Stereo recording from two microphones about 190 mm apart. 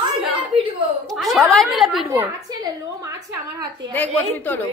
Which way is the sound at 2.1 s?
15° right (ahead or behind).